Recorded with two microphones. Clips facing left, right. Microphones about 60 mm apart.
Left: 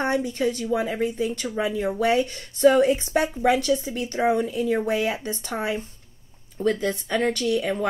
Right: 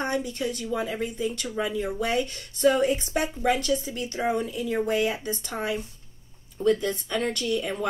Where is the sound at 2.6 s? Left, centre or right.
Left.